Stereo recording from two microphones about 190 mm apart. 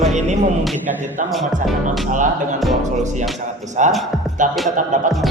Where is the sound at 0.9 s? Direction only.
40° right (ahead or behind).